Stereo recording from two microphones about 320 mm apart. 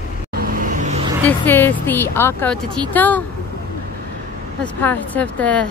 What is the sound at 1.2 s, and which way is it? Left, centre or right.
A woman's voice, centre.